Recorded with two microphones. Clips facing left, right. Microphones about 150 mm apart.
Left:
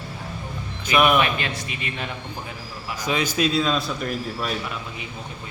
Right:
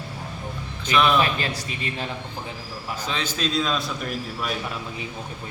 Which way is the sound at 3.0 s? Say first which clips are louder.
Left 6 dB; 10° left (ahead or behind).